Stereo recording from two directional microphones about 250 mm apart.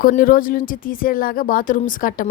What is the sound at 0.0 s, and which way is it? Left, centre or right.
Speech, left.